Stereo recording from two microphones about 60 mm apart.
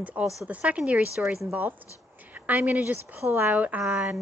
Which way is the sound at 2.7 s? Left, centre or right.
Right.